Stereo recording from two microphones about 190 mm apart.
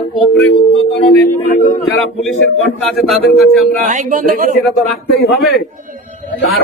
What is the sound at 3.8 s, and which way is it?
Speech, 45° right (ahead or behind).